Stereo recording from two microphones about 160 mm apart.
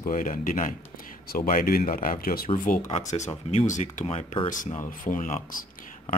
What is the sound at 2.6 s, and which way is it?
Speech, 55° left (ahead or behind).